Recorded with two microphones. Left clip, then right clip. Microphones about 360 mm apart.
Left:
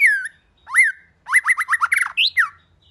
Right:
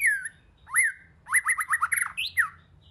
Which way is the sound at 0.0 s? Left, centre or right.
Centre.